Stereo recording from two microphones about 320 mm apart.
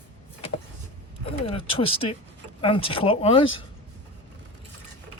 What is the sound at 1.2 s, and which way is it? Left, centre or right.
Speech, centre.